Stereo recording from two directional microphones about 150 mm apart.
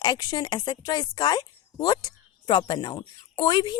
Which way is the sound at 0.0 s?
25° left (ahead or behind).